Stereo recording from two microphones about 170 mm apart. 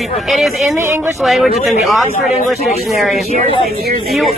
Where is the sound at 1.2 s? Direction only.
Centre (ahead or behind).